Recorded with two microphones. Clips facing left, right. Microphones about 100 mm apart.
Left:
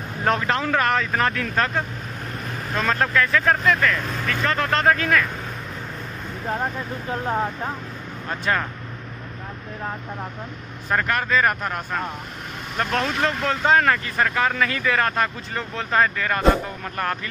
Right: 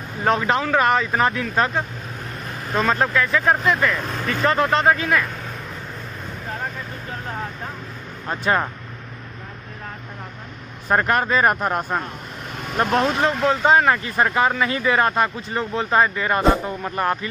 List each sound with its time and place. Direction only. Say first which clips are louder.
0.2 s speech: right 2 dB; 5° right (ahead or behind)
4.7 s speech: right 1 dB; 10° right (ahead or behind)
8.3 s speech: right 3 dB; 20° right (ahead or behind)
10.9 s speech: right 3 dB; 30° right (ahead or behind)
13.3 s speech: right 2 dB; 15° right (ahead or behind)